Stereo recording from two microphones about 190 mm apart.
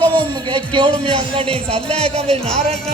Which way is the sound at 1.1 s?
30° right (ahead or behind).